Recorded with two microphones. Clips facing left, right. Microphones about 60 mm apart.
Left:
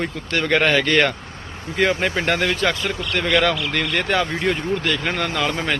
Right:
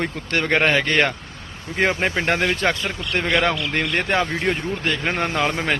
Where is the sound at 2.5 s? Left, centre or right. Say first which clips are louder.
Even; right.